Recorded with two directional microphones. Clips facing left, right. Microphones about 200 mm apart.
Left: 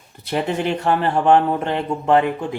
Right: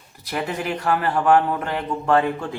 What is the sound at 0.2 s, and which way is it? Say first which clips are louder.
Speech: left 5 dB; 25° left (ahead or behind).